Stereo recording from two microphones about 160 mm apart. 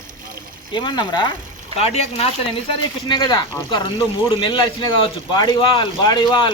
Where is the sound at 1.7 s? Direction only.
40° left (ahead or behind).